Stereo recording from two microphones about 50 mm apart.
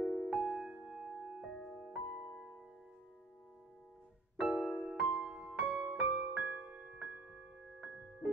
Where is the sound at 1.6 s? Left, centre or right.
Centre.